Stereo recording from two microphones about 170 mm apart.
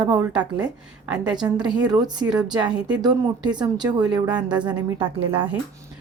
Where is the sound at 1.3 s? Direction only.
25° right (ahead or behind).